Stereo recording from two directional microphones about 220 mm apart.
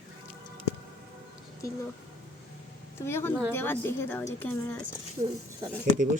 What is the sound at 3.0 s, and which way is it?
A woman's voice, 10° left (ahead or behind).